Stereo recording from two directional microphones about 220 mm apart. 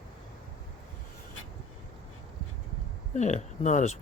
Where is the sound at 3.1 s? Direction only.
30° left (ahead or behind).